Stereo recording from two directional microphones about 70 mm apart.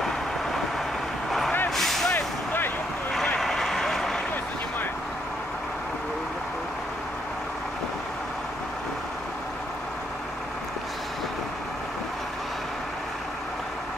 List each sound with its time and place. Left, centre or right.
1.8 s vehicle: centre
2.1 s vehicle: left
3.3 s vehicle: centre